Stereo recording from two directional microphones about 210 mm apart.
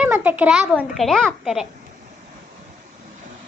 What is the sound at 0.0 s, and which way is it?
A child's voice, 5° right (ahead or behind).